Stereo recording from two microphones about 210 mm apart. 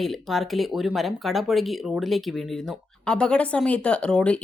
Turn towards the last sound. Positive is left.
turn(degrees=5)  # may be behind; listen again after turning